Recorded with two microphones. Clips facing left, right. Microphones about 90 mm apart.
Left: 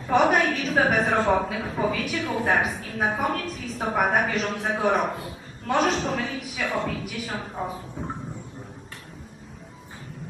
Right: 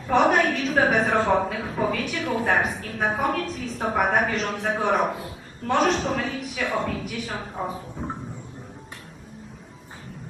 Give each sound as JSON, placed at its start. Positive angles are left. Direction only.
{"t": 0.1, "sound": "a woman's voice", "side_deg": 0}